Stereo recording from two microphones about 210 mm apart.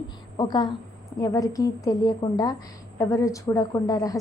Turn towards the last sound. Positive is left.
turn(degrees=15)  # may be behind; listen again after turning